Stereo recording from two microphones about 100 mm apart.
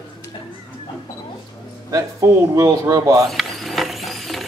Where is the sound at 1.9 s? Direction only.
35° right (ahead or behind).